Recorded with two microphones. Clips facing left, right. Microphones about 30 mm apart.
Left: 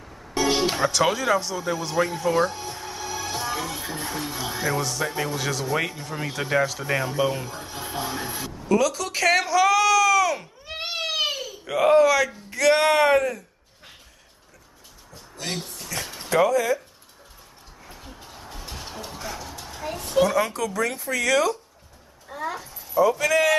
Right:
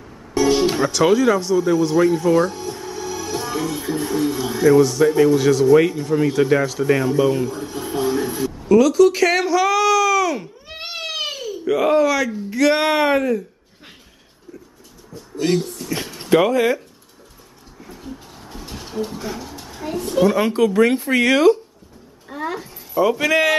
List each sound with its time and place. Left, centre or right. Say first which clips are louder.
0.4 s speech: right 5 dB; centre
15.3 s speech: right 12 dB; centre
15.6 s a sound: right 9 dB; centre
16.2 s speech: right 5 dB; right
17.8 s music: right 7 dB; centre
19.6 s a sound: right 7 dB; centre
20.2 s speech: right 7 dB; right
22.3 s speech: right 4 dB; centre
22.9 s a man's voice: right 3 dB; right